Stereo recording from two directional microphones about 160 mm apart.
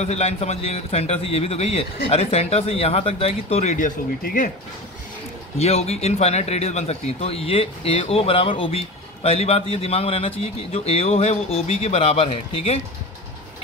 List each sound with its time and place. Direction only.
0.0 s speech: 40° left (ahead or behind)
3.7 s speech: 60° left (ahead or behind)
5.6 s speech: 40° left (ahead or behind)